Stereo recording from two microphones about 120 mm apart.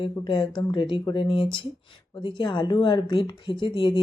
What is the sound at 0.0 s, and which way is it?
Speech, 45° left (ahead or behind).